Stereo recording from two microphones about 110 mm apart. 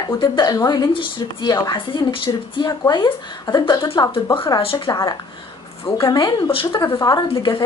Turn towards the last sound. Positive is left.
turn(degrees=45)  # may be behind; listen again after turning